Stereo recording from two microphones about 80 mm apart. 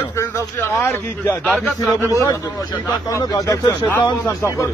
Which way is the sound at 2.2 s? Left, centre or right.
Left.